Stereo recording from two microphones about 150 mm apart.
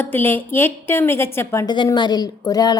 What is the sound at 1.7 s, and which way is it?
A woman's voice, 30° left (ahead or behind).